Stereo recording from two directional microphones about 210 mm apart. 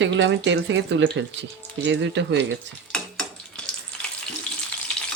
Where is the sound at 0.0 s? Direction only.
60° right (ahead or behind).